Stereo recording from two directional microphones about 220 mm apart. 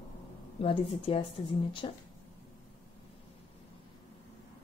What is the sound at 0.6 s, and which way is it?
Speech, 25° left (ahead or behind).